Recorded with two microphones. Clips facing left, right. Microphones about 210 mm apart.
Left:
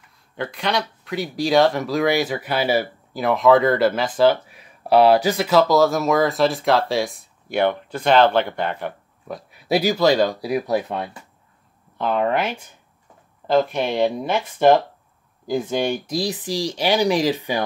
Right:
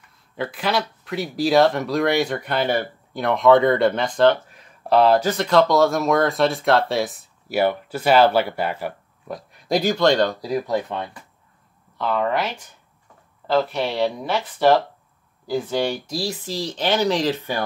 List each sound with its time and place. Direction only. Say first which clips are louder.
0.4 s speech: even; 5° right (ahead or behind)
9.5 s speech: left 1 dB; 5° left (ahead or behind)